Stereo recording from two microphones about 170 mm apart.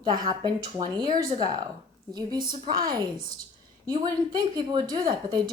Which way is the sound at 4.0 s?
25° right (ahead or behind).